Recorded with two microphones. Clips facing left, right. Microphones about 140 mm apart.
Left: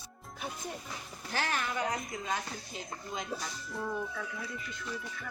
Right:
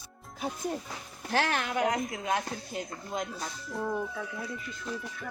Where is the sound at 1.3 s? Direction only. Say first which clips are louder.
Right 5 dB; 65° right (ahead or behind).